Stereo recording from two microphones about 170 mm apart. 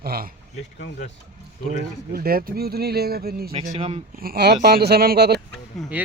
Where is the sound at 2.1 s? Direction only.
60° right (ahead or behind).